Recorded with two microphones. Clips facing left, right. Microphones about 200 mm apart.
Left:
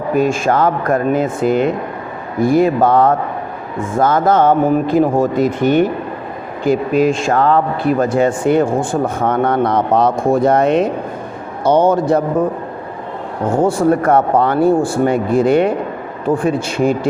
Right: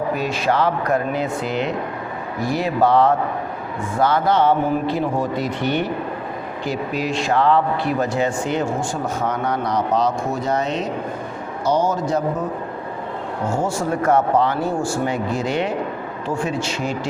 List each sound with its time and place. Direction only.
0.1 s a man's voice: 50° left (ahead or behind)
13.5 s speech: 55° left (ahead or behind)